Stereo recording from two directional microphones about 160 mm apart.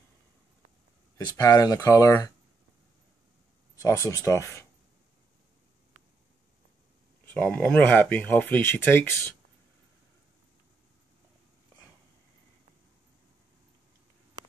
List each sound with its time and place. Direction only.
1.1 s speech: 20° left (ahead or behind)
3.8 s speech: 20° left (ahead or behind)
7.2 s speech: 10° left (ahead or behind)